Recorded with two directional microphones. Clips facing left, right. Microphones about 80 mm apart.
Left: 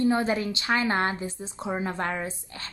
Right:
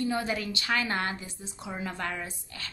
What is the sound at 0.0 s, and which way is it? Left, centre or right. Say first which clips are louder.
Speech: left 6 dB; left.